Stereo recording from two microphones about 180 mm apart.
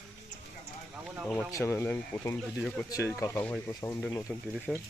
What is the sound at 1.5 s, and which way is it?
Speech, 15° left (ahead or behind).